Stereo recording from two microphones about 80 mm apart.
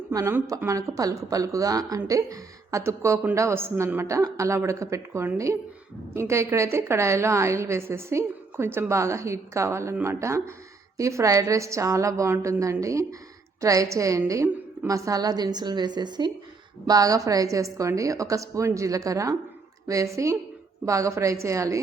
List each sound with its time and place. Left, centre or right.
0.7 s a woman's voice: right
16.8 s a woman's voice: right